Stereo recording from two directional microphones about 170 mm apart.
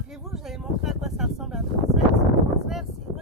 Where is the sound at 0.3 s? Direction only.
Centre (ahead or behind).